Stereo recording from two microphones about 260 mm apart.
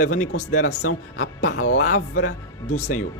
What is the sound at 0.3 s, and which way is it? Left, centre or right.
Speech, left.